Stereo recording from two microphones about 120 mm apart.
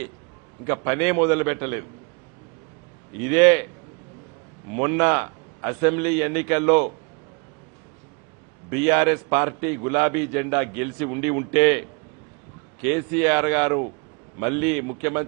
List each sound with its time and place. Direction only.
0.6 s a man's voice: 20° right (ahead or behind)
3.2 s a man's voice: 20° right (ahead or behind)
4.7 s a man's voice: 20° right (ahead or behind)
8.7 s a man's voice: 20° right (ahead or behind)
12.8 s a man's voice: 20° right (ahead or behind)